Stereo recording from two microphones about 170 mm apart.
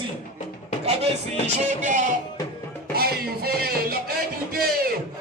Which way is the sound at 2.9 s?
65° right (ahead or behind).